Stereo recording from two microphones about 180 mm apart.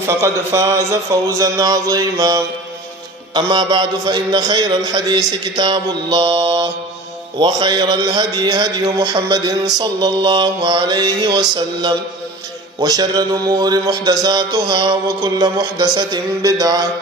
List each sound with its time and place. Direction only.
0.0 s a man's voice: 15° right (ahead or behind)